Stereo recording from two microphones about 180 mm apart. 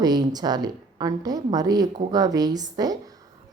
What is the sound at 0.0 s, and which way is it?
A woman's voice, 20° right (ahead or behind).